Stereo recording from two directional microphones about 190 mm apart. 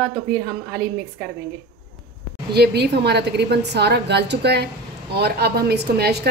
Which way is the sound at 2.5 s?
60° right (ahead or behind).